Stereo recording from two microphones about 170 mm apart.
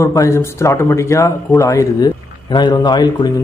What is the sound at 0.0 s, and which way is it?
A man's voice, 15° left (ahead or behind).